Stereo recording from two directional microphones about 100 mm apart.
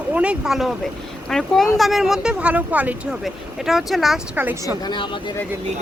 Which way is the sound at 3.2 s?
Centre (ahead or behind).